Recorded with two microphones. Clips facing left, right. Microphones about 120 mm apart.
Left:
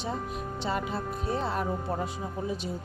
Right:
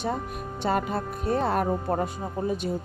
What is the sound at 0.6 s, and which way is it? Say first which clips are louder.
Speech: right 6 dB; 50° right (ahead or behind).